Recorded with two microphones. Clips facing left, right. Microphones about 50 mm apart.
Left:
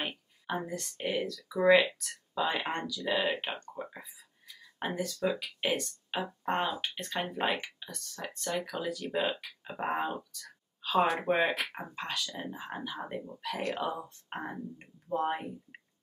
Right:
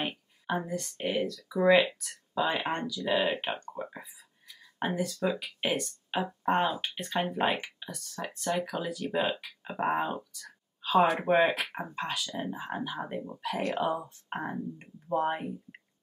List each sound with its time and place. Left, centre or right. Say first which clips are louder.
0.5 s speech: right 3 dB; centre
13.2 s speech: right 3 dB; right
13.9 s speech: right 4 dB; centre